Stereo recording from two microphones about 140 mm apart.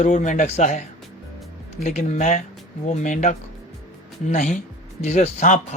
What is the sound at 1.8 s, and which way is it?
A man's voice, 60° left (ahead or behind).